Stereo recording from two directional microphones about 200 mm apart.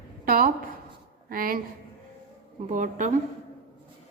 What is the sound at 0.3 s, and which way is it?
A woman's voice, 45° right (ahead or behind).